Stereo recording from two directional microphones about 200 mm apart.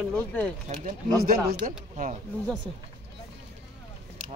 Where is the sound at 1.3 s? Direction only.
50° right (ahead or behind).